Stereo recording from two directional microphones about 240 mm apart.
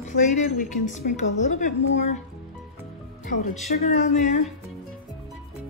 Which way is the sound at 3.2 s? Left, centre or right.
Left.